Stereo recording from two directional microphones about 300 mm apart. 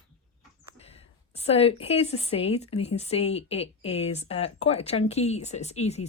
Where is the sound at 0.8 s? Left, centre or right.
Left.